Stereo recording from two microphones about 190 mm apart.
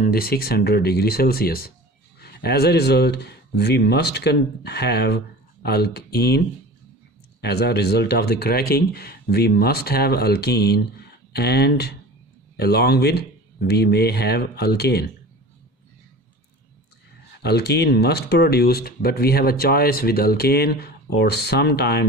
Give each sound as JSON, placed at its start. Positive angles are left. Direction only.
{"t": 0.0, "sound": "speech", "side_deg": 55}
{"t": 7.4, "sound": "speech", "side_deg": 60}
{"t": 17.4, "sound": "speech", "side_deg": 60}